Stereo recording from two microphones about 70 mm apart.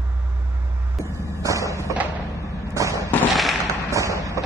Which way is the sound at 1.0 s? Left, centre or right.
Right.